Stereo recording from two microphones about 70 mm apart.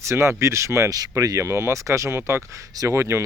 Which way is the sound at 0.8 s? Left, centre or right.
Right.